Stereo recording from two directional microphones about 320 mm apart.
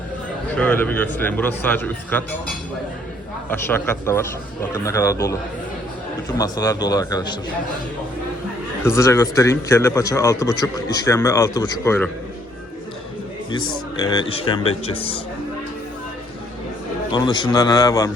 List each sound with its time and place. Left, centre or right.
0.5 s a man's voice: centre
3.5 s a man's voice: centre
8.8 s a man's voice: centre
13.5 s a man's voice: centre
17.1 s a man's voice: centre